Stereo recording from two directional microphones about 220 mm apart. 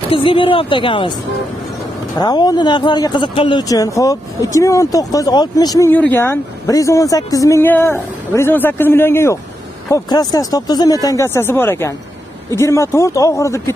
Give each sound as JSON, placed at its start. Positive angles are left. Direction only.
{"t": 0.1, "sound": "a woman's voice", "side_deg": 25}
{"t": 2.1, "sound": "speech", "side_deg": 20}